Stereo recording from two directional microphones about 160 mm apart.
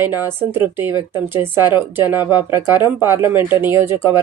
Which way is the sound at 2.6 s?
25° left (ahead or behind).